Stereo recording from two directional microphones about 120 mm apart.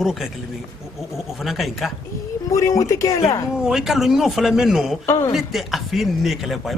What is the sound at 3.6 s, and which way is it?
A man's voice, 5° right (ahead or behind).